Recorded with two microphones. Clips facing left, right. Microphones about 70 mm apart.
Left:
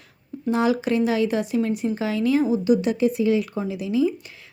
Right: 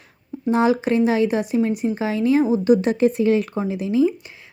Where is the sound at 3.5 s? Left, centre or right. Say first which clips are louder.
Right 3 dB; right.